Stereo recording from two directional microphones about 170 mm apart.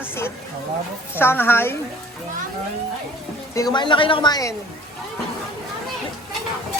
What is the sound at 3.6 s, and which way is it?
Speech, 25° left (ahead or behind).